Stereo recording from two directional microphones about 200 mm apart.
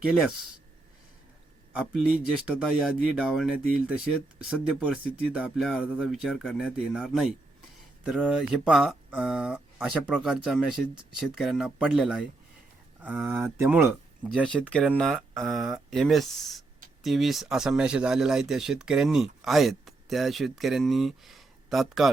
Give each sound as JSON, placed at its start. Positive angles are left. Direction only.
{"t": 0.1, "sound": "speech", "side_deg": -5}
{"t": 2.8, "sound": "speech", "side_deg": -5}
{"t": 3.6, "sound": "speech", "side_deg": -45}
{"t": 3.8, "sound": "speech", "side_deg": -5}
{"t": 14.3, "sound": "speech", "side_deg": 0}